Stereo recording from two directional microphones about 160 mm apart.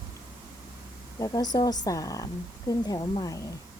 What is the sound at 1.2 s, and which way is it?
Speech, 25° left (ahead or behind).